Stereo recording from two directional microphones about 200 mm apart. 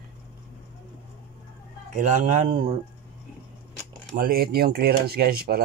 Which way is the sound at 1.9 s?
40° right (ahead or behind).